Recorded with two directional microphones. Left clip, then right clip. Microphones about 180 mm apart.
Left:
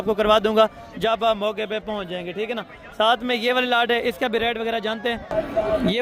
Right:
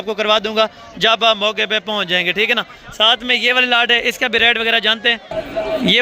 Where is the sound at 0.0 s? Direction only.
20° left (ahead or behind).